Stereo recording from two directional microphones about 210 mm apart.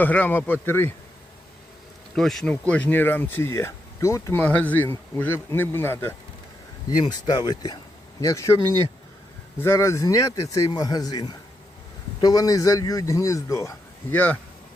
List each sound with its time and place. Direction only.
0.0 s speech: 10° left (ahead or behind)
2.1 s speech: centre (ahead or behind)
9.6 s speech: 10° left (ahead or behind)